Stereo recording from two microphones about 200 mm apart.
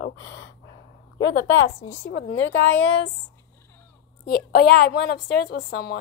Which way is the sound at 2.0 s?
65° left (ahead or behind).